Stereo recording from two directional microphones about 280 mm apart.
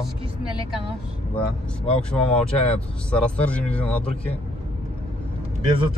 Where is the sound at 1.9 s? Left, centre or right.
Centre.